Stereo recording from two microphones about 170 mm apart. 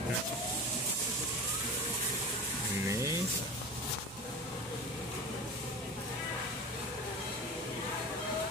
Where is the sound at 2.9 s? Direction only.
15° right (ahead or behind).